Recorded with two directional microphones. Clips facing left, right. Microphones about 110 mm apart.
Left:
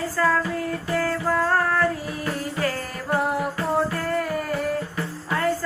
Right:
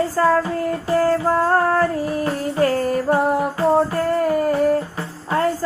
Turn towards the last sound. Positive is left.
turn(degrees=-30)  # may be behind; listen again after turning